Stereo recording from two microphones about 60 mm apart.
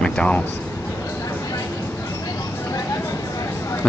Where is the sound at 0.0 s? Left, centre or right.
Centre.